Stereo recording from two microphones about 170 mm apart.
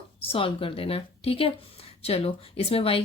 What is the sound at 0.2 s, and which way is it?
Speech, 30° left (ahead or behind).